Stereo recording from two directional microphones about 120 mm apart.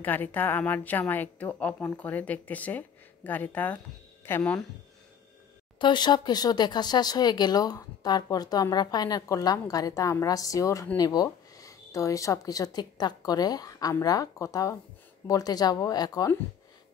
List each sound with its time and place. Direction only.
0.0 s a woman's voice: 15° left (ahead or behind)
5.8 s speech: 40° left (ahead or behind)